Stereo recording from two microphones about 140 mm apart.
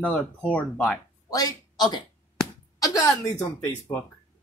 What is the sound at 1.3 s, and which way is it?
A woman's voice, 30° left (ahead or behind).